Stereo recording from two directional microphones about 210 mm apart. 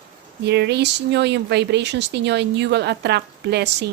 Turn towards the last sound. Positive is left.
turn(degrees=-50)  # may be behind; listen again after turning